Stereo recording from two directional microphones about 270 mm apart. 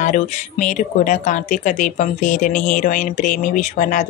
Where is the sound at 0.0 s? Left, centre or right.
Left.